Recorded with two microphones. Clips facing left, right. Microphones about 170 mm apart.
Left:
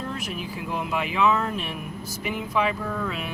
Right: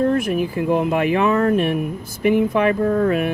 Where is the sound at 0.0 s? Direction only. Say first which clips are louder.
Right 14 dB; 55° right (ahead or behind).